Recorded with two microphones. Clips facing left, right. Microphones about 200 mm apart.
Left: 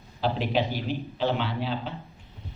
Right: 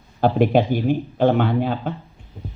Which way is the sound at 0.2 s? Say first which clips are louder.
Right 9 dB; 50° right (ahead or behind).